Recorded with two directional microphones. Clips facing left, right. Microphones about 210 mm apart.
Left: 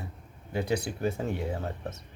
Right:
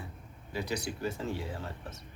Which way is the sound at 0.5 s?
55° left (ahead or behind).